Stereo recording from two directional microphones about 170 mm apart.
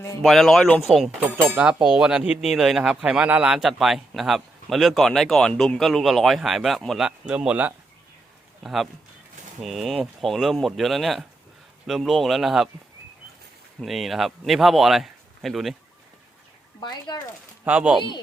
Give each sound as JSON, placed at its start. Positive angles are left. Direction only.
{"t": 0.2, "sound": "speech", "side_deg": 0}
{"t": 13.8, "sound": "speech", "side_deg": 0}
{"t": 17.1, "sound": "speech", "side_deg": 25}
{"t": 17.7, "sound": "speech", "side_deg": -5}